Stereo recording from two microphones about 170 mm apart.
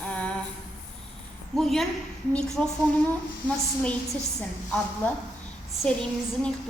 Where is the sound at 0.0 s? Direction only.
5° left (ahead or behind).